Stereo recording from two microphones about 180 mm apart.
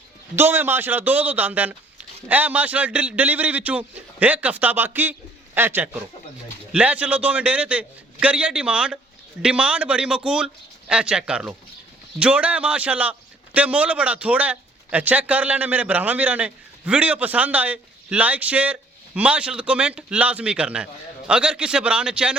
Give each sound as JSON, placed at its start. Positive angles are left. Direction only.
{"t": 0.3, "sound": "a man's voice", "side_deg": -10}